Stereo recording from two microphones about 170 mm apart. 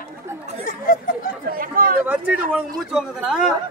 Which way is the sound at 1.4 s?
60° right (ahead or behind).